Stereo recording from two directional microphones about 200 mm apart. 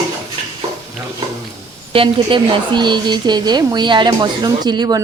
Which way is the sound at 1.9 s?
25° right (ahead or behind).